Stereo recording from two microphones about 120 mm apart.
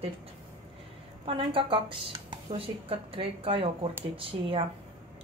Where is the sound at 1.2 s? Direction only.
45° right (ahead or behind).